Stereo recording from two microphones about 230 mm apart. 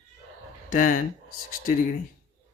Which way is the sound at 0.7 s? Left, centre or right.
Left.